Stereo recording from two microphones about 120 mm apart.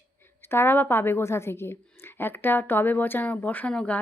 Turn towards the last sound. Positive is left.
turn(degrees=10)  # may be behind; listen again after turning